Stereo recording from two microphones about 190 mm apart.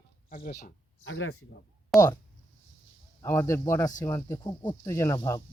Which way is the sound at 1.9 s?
Centre (ahead or behind).